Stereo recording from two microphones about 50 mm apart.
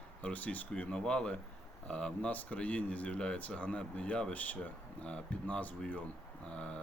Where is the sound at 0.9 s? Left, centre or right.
Centre.